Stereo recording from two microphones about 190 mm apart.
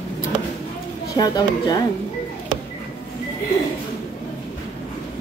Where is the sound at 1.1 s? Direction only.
20° left (ahead or behind).